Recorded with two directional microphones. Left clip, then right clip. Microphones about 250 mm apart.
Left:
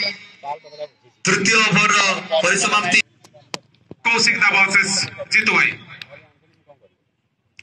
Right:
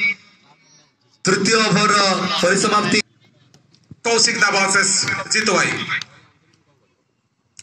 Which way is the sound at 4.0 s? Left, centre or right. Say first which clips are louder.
Left 1 dB; right.